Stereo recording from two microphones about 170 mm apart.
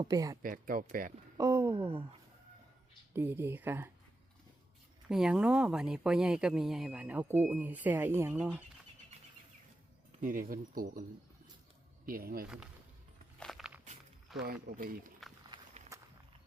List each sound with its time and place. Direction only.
0.0 s speech: 20° right (ahead or behind)
0.4 s speech: 55° right (ahead or behind)
1.4 s a sound: 15° right (ahead or behind)
3.1 s speech: 15° right (ahead or behind)
5.0 s speech: 5° right (ahead or behind)
10.1 s speech: 50° right (ahead or behind)
12.0 s speech: 60° right (ahead or behind)
13.4 s walk: centre (ahead or behind)
14.4 s speech: 60° right (ahead or behind)
15.5 s walk: 25° right (ahead or behind)